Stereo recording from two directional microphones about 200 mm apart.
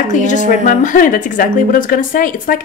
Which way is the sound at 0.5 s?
40° left (ahead or behind).